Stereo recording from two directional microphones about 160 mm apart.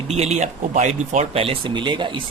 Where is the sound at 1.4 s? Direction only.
35° right (ahead or behind).